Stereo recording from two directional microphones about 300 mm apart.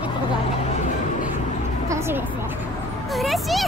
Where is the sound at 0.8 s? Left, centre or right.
Left.